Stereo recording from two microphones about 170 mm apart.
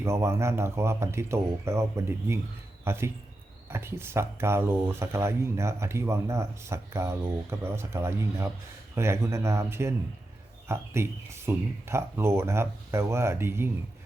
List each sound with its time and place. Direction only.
0.0 s speech: 15° right (ahead or behind)